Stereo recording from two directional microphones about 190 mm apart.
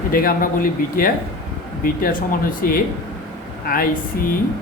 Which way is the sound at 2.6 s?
50° left (ahead or behind).